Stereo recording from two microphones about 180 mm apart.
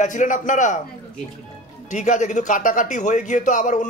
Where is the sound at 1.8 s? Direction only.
45° left (ahead or behind).